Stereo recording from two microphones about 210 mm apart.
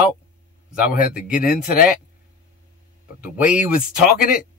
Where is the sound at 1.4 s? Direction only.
45° left (ahead or behind).